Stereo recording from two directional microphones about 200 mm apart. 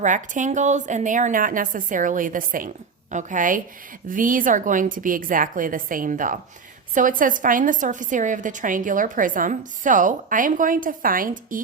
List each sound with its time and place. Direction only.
0.0 s a woman's voice: 40° right (ahead or behind)